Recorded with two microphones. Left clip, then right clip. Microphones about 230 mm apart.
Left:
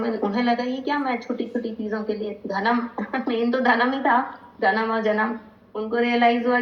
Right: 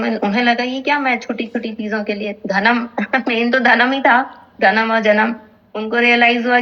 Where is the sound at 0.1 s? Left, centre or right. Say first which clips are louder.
Right 8 dB; right.